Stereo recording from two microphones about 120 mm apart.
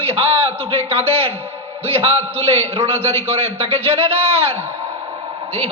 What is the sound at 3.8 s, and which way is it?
Speech, 55° right (ahead or behind).